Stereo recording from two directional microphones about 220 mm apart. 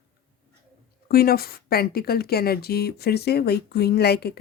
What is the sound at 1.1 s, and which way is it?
Speech, 45° left (ahead or behind).